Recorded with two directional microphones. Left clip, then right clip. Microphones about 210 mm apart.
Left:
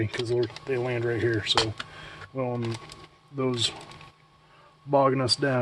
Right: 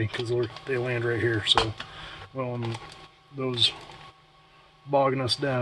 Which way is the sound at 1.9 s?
20° left (ahead or behind).